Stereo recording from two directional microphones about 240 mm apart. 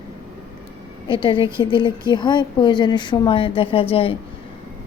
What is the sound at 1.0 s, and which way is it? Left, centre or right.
A woman's voice, centre.